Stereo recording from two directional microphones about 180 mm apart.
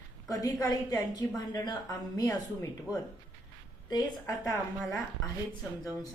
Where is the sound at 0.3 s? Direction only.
20° left (ahead or behind).